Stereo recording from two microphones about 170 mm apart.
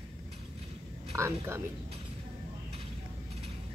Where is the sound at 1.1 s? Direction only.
15° right (ahead or behind).